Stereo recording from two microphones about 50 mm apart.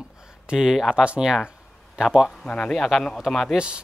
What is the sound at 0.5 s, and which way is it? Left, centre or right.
A man's voice, centre.